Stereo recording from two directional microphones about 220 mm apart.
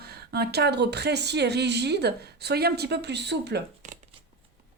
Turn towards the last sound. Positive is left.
turn(degrees=-50)  # may be behind; listen again after turning